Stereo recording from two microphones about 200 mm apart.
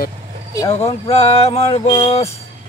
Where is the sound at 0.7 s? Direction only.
30° left (ahead or behind).